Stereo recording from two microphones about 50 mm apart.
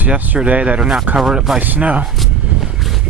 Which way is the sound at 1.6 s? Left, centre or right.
Right.